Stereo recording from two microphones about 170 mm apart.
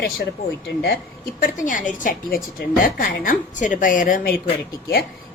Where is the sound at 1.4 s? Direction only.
50° left (ahead or behind).